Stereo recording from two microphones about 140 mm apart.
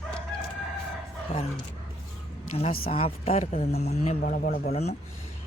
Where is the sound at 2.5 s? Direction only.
45° left (ahead or behind).